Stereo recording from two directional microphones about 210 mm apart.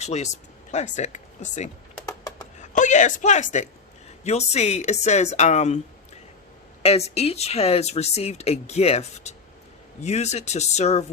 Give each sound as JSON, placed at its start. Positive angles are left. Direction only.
{"t": 0.0, "sound": "speech", "side_deg": 30}
{"t": 2.6, "sound": "a sound", "side_deg": 35}
{"t": 4.2, "sound": "speech", "side_deg": 30}
{"t": 6.8, "sound": "speech", "side_deg": 30}